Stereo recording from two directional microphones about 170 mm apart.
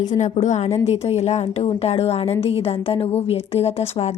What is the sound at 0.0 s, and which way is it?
A woman's voice, 45° left (ahead or behind).